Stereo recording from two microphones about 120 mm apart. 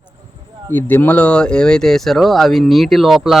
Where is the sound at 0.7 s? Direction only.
20° left (ahead or behind).